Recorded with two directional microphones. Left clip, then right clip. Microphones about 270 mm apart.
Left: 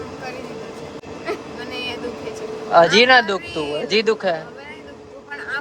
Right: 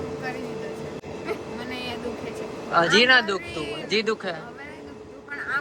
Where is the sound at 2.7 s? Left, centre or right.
Centre.